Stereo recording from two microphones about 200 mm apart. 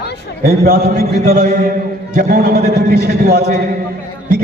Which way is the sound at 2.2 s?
55° right (ahead or behind).